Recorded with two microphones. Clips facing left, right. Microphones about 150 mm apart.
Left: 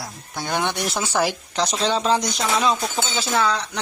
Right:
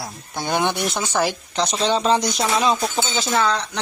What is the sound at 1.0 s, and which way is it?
Speech, 10° left (ahead or behind).